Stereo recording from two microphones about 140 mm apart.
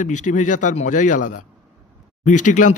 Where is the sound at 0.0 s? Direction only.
60° left (ahead or behind).